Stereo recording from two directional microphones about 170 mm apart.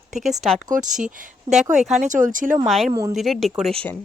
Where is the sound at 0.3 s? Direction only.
Centre (ahead or behind).